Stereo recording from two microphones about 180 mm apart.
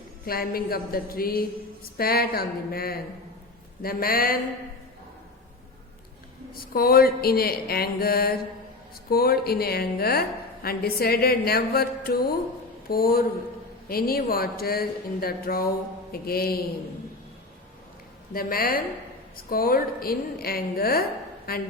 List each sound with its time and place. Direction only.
0.3 s a woman's voice: 55° left (ahead or behind)
6.5 s a woman's voice: 55° left (ahead or behind)
18.3 s a woman's voice: 55° left (ahead or behind)